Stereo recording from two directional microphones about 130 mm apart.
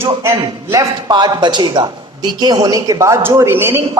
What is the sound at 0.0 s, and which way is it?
A man's voice, 20° right (ahead or behind).